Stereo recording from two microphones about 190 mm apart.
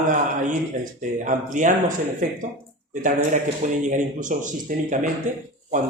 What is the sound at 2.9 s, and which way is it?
Speech, 45° right (ahead or behind).